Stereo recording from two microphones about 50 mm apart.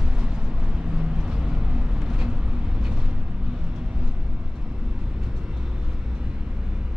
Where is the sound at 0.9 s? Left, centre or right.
Centre.